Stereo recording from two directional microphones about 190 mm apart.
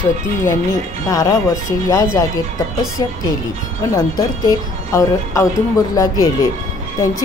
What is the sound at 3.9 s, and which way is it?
A woman's voice, 20° left (ahead or behind).